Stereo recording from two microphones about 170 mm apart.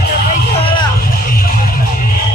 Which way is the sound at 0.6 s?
30° left (ahead or behind).